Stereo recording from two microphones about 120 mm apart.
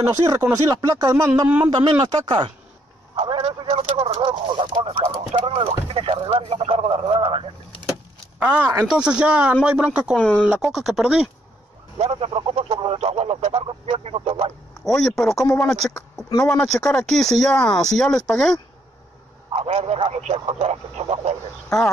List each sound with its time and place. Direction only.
0.0 s speech: 25° right (ahead or behind)
1.7 s speech: 40° right (ahead or behind)
3.2 s a sound: 45° right (ahead or behind)
3.6 s speech: 55° right (ahead or behind)
8.4 s speech: 10° right (ahead or behind)
10.1 s speech: 5° left (ahead or behind)
10.4 s speech: 5° right (ahead or behind)
12.0 s speech: 55° right (ahead or behind)
14.9 s speech: 5° left (ahead or behind)
16.3 s speech: 30° left (ahead or behind)
16.5 s speech: 5° left (ahead or behind)
19.5 s speech: 55° right (ahead or behind)